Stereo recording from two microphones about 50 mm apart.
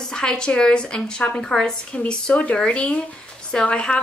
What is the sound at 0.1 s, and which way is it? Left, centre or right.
Speech, centre.